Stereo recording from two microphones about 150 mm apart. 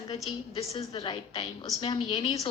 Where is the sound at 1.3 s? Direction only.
40° left (ahead or behind).